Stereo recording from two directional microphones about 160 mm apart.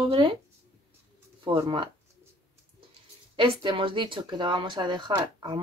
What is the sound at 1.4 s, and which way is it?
Speech, 30° right (ahead or behind).